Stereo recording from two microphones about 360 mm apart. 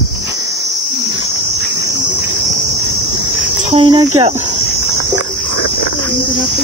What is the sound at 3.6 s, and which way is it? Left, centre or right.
Speech, centre.